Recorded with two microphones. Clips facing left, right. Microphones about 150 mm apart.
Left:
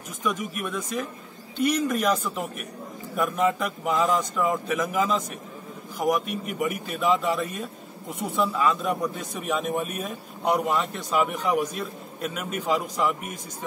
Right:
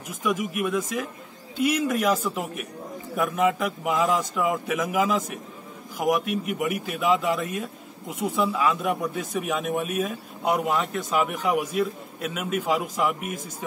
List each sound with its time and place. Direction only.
0.2 s speech: 5° right (ahead or behind)